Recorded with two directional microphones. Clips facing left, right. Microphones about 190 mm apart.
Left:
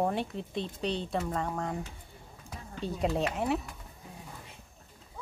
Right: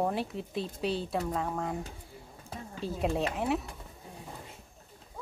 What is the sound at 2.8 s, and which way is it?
Speech, centre (ahead or behind).